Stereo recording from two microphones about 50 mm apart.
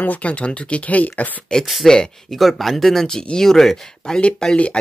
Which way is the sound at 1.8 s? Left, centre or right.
Centre.